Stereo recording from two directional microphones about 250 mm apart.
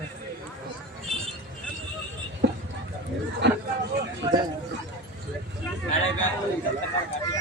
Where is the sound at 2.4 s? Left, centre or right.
Right.